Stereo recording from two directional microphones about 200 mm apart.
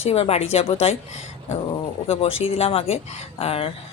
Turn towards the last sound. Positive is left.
turn(degrees=30)  # may be behind; listen again after turning